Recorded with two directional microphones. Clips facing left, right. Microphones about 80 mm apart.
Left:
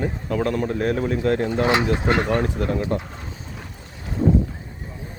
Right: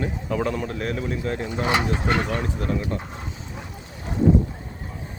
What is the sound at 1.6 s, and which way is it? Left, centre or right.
Speech, left.